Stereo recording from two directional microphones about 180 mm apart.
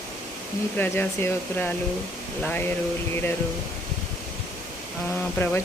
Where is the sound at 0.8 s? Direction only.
10° left (ahead or behind).